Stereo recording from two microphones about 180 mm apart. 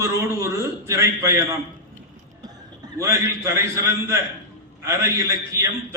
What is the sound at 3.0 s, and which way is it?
A man's voice, 15° right (ahead or behind).